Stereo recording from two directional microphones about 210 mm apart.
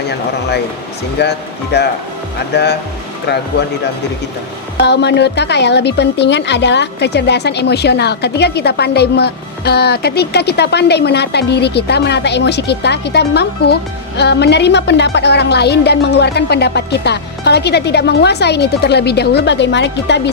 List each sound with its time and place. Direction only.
1.2 s speech: 50° left (ahead or behind)
4.8 s speech: 55° left (ahead or behind)